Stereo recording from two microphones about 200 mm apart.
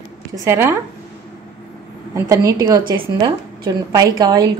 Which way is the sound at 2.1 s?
15° right (ahead or behind).